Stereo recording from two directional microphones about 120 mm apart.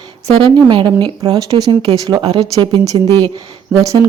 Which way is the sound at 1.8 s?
50° right (ahead or behind).